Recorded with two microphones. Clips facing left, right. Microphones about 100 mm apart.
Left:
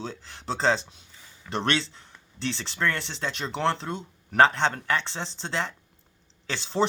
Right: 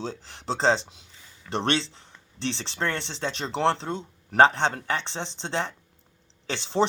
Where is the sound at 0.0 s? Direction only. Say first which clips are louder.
Right 2 dB; 20° right (ahead or behind).